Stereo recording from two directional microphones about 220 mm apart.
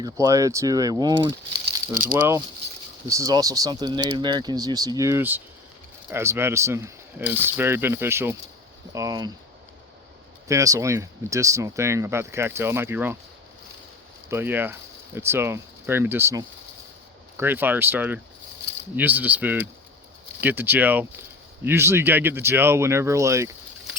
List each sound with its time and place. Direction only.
0.0 s speech: 15° right (ahead or behind)
2.0 s speech: 40° right (ahead or behind)
3.1 s speech: 15° right (ahead or behind)
10.5 s speech: 15° right (ahead or behind)
14.3 s speech: 10° right (ahead or behind)